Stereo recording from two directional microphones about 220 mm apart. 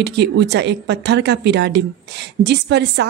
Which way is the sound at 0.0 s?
50° right (ahead or behind).